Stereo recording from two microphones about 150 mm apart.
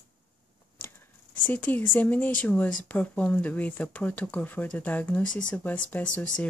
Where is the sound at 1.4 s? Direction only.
10° left (ahead or behind).